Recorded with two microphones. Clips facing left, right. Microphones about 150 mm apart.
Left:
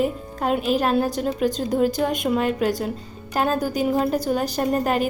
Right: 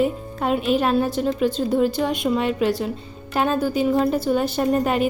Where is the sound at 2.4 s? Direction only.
45° left (ahead or behind).